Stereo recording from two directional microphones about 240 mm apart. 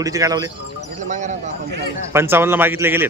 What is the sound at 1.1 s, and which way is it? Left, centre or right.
Speech, right.